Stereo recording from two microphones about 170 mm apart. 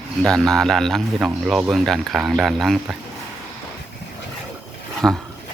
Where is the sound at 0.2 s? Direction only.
5° left (ahead or behind).